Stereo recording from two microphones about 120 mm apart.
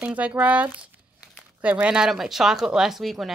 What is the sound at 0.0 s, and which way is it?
Speech, 10° right (ahead or behind).